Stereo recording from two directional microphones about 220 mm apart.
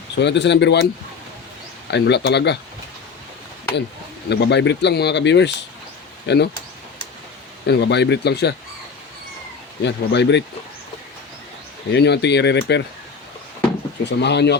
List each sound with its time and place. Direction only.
0.2 s speech: 50° left (ahead or behind)
1.9 s speech: 50° left (ahead or behind)
4.3 s speech: 50° left (ahead or behind)
7.7 s speech: 50° left (ahead or behind)
9.8 s speech: 50° left (ahead or behind)
11.9 s speech: 50° left (ahead or behind)
14.0 s speech: 50° left (ahead or behind)